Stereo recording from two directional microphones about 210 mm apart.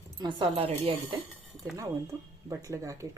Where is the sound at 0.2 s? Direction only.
20° right (ahead or behind).